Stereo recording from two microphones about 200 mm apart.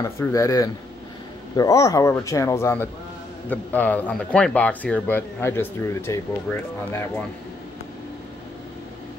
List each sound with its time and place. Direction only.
0.0 s speech: 15° left (ahead or behind)